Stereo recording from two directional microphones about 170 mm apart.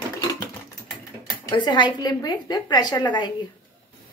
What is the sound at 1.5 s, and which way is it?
A woman's voice, 25° left (ahead or behind).